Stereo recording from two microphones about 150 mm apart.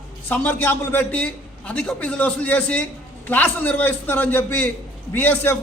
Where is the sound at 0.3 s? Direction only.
15° left (ahead or behind).